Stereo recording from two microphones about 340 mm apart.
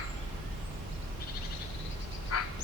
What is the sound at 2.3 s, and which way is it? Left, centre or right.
Frog, left.